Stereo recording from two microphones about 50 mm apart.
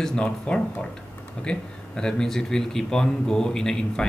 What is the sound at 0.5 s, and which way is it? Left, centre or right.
Speech, left.